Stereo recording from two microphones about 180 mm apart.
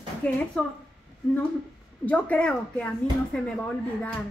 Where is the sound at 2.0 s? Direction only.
10° left (ahead or behind).